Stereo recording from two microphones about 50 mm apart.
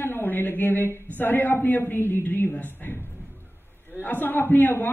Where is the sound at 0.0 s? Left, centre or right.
Left.